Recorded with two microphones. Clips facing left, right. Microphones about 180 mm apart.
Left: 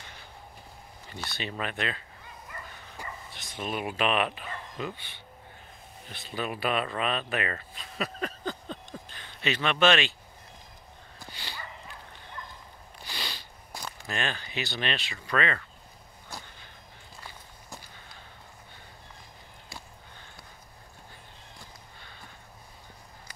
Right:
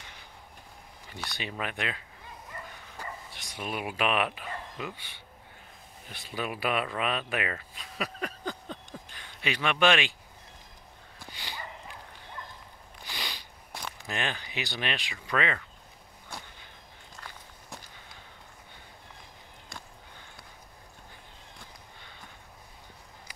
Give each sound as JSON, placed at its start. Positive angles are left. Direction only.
{"t": 1.0, "sound": "speech", "side_deg": -15}
{"t": 3.3, "sound": "speech", "side_deg": -10}
{"t": 11.2, "sound": "dog", "side_deg": -15}
{"t": 13.1, "sound": "a sound", "side_deg": -15}
{"t": 13.7, "sound": "a sound", "side_deg": 0}
{"t": 14.0, "sound": "speech", "side_deg": -15}